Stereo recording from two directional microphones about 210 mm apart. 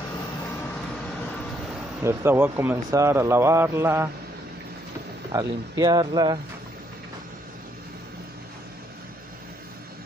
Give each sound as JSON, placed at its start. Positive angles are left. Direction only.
{"t": 2.0, "sound": "a man's voice", "side_deg": -10}
{"t": 5.3, "sound": "speech", "side_deg": -15}